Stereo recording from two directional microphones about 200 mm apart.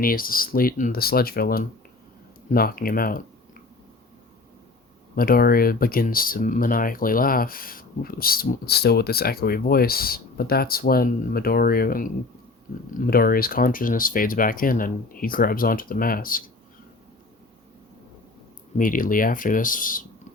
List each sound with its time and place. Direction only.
0.0 s speech: 45° left (ahead or behind)
5.1 s speech: 45° left (ahead or behind)
18.8 s speech: 45° left (ahead or behind)